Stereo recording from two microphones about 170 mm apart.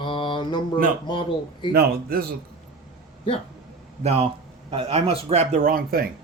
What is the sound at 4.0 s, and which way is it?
Speech, 40° right (ahead or behind).